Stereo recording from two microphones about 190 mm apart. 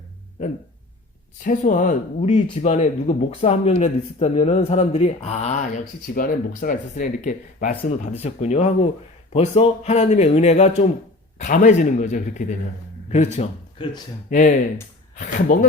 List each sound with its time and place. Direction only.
1.5 s a man's voice: 45° left (ahead or behind); by 14.0 s 30° left (ahead or behind)
14.3 s speech: 45° left (ahead or behind)